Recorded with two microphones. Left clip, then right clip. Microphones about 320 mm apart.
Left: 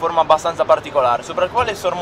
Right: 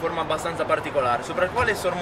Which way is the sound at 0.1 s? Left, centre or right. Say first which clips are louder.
Left 11 dB; centre.